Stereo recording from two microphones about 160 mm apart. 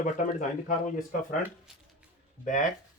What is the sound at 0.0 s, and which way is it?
Speech, 50° left (ahead or behind).